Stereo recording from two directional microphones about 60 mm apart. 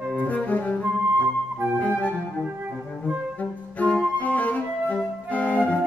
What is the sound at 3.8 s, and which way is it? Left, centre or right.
Flute, left.